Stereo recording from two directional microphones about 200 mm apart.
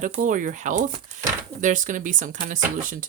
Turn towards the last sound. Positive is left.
turn(degrees=-40)  # may be behind; listen again after turning